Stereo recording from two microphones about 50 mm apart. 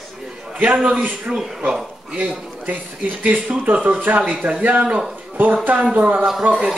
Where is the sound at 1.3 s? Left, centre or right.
Centre.